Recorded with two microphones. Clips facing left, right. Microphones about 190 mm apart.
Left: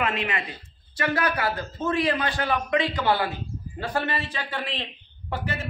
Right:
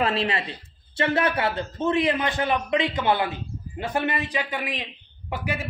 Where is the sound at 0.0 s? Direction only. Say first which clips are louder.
Right 3 dB; 35° right (ahead or behind).